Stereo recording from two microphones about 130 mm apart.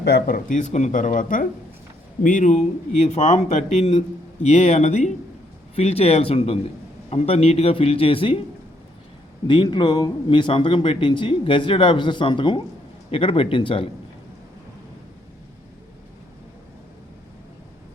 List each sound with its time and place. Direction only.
0.3 s speech: 90° left; by 5.1 s 60° left (ahead or behind)
5.7 s speech: 50° left (ahead or behind)
9.5 s speech: 35° left (ahead or behind)